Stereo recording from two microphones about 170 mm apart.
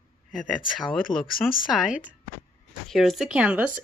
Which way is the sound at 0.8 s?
Centre (ahead or behind).